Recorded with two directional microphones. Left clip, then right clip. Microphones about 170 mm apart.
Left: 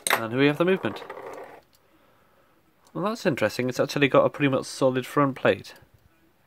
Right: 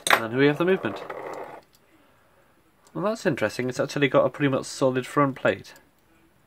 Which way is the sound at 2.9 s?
35° left (ahead or behind).